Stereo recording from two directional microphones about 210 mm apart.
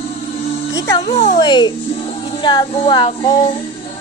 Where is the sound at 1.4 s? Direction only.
20° left (ahead or behind).